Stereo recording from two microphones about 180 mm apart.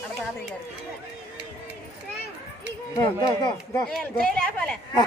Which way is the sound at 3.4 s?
25° left (ahead or behind).